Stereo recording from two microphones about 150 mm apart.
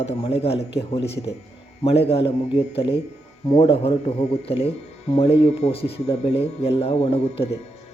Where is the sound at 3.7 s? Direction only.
40° left (ahead or behind).